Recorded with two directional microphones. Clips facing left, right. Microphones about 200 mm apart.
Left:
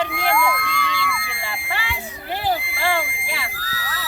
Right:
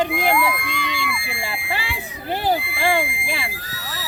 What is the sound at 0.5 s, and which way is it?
Speech, 20° right (ahead or behind).